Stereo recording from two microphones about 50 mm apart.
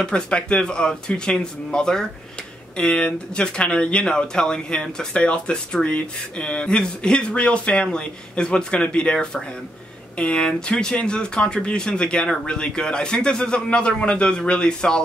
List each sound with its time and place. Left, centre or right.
0.0 s speech: left